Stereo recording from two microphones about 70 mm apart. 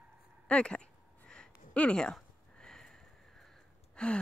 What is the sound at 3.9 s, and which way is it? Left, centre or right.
Gasp, centre.